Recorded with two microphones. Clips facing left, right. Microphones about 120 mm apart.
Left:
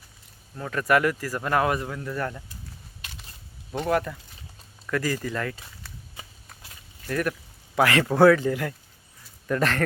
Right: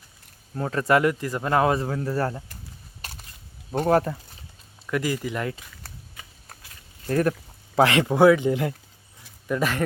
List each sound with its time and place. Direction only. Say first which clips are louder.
0.5 s speech: right 2 dB; 30° right (ahead or behind)
3.0 s a sound: right 4 dB; 40° right (ahead or behind)
3.8 s speech: right 4 dB; 35° right (ahead or behind)
4.9 s speech: right 1 dB; 15° right (ahead or behind)
7.1 s speech: right 5 dB; 30° right (ahead or behind)
9.5 s speech: even; 10° right (ahead or behind)